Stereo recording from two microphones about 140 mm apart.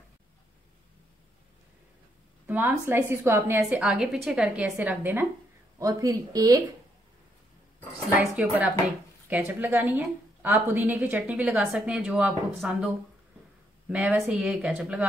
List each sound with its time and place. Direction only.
2.4 s a woman's voice: 15° right (ahead or behind)
3.6 s a woman's voice: 5° right (ahead or behind)
5.8 s a woman's voice: 25° right (ahead or behind)
8.4 s a woman's voice: 10° right (ahead or behind)